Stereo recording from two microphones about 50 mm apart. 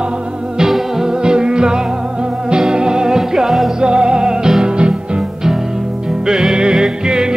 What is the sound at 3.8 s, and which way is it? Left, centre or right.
Music, centre.